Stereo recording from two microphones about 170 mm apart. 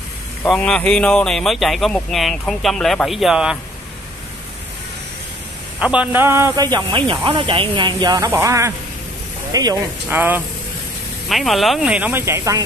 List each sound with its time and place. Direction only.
0.5 s speech: 5° left (ahead or behind)
5.8 s speech: 5° right (ahead or behind)
10.0 s speech: 10° right (ahead or behind)
11.2 s speech: centre (ahead or behind); by 12.6 s 15° right (ahead or behind)